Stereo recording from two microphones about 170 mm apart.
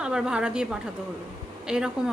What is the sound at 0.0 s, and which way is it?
A woman's voice, 5° right (ahead or behind).